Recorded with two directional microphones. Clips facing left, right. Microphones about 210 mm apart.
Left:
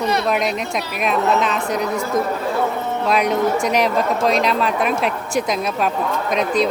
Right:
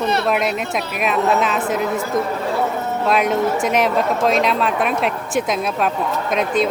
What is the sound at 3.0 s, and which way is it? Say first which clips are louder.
Speech: even; centre (ahead or behind).